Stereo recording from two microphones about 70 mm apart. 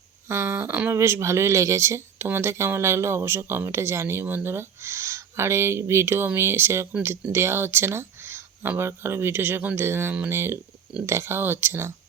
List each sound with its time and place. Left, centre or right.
0.3 s speech: right